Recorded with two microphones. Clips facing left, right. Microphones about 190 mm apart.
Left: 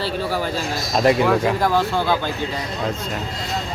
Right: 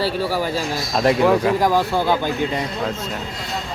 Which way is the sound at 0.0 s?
10° right (ahead or behind).